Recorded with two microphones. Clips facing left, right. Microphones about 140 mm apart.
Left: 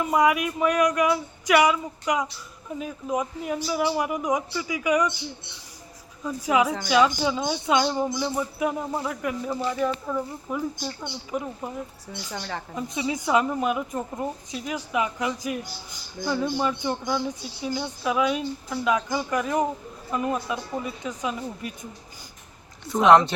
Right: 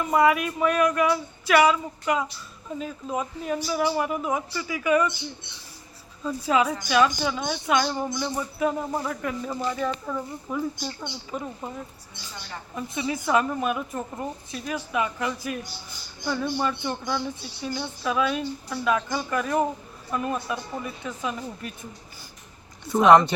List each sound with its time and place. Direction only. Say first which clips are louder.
0.0 s a woman's voice: right 1 dB; 15° left (ahead or behind)
6.2 s a woman's voice: even; 15° left (ahead or behind)
8.9 s a woman's voice: even; 5° left (ahead or behind)
12.3 s a woman's voice: left 6 dB; 90° left
12.7 s a woman's voice: even; 15° left (ahead or behind)
23.0 s speech: even; centre (ahead or behind)